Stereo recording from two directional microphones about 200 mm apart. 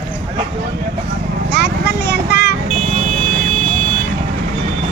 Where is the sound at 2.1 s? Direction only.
50° left (ahead or behind).